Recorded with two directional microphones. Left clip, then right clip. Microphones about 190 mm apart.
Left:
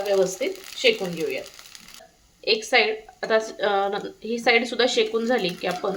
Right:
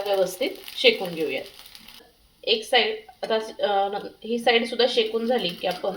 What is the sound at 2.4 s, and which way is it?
A woman's voice, 20° left (ahead or behind).